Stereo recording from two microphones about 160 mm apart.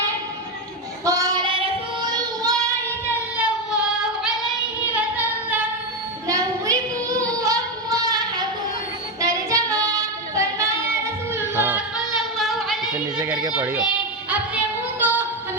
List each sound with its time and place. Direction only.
1.0 s child singing: 20° right (ahead or behind)
3.3 s child singing: 5° right (ahead or behind)
4.9 s a sound: 10° right (ahead or behind)
6.2 s child singing: 20° right (ahead or behind)
9.2 s singing: 20° right (ahead or behind)
12.4 s singing: centre (ahead or behind)
13.1 s a sound: 20° right (ahead or behind)
13.5 s child singing: 10° right (ahead or behind)
14.3 s female singing: 10° right (ahead or behind)